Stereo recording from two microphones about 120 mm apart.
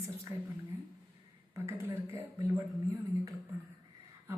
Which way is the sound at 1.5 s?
20° right (ahead or behind).